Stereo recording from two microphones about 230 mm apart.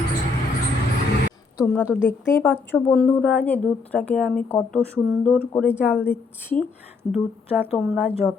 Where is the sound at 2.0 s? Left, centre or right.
Centre.